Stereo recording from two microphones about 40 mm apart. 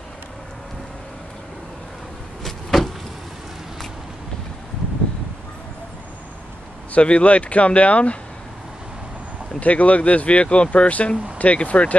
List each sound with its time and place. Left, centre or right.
2.4 s vehicle: centre
6.9 s speech: left
9.6 s speech: left